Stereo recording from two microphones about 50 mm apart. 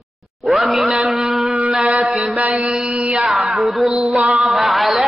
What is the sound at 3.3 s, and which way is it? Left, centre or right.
A man's voice, centre.